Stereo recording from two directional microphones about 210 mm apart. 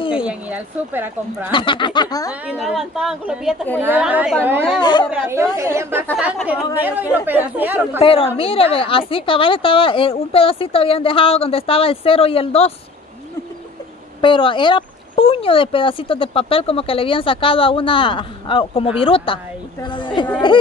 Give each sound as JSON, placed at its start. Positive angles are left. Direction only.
{"t": 0.1, "sound": "speech", "side_deg": -5}
{"t": 1.5, "sound": "speech", "side_deg": 25}
{"t": 2.6, "sound": "a woman's voice", "side_deg": 0}
{"t": 4.7, "sound": "speech", "side_deg": 20}
{"t": 5.6, "sound": "a woman's voice", "side_deg": -15}
{"t": 8.0, "sound": "speech", "side_deg": 25}
{"t": 14.2, "sound": "speech", "side_deg": 25}